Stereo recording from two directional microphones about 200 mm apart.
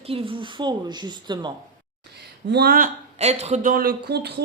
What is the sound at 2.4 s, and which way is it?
Speech, 55° right (ahead or behind).